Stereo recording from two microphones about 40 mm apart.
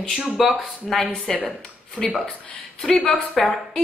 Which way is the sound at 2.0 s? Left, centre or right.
Right.